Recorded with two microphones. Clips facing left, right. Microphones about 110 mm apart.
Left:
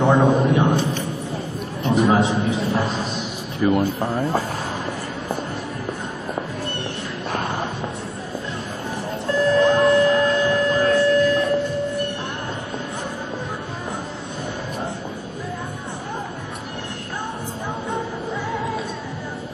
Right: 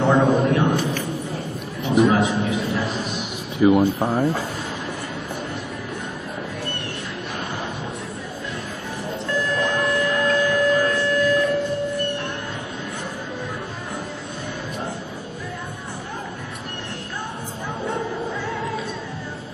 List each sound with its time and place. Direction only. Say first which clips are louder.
0.0 s a sound: left 1 dB; 15° left (ahead or behind); by 2.9 s 35° left (ahead or behind)
3.6 s speech: right 3 dB; 5° right (ahead or behind)
9.3 s music: left 7 dB; 30° left (ahead or behind)